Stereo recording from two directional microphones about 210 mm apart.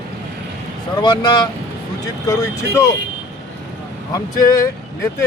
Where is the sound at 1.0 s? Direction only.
20° left (ahead or behind).